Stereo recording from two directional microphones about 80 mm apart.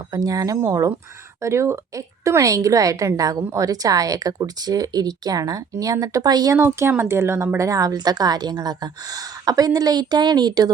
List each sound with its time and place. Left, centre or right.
0.1 s speech: right
6.6 s speech: right
7.9 s a woman's voice: right